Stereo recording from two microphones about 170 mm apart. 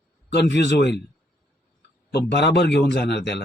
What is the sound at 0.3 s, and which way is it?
Speech, 80° left.